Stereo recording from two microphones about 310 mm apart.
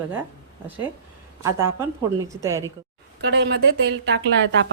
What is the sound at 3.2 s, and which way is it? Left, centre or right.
Speech, right.